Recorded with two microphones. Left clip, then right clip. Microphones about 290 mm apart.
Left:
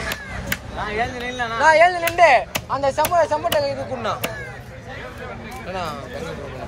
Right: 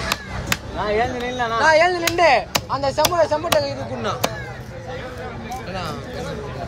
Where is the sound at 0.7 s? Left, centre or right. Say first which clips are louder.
Right 4 dB; centre.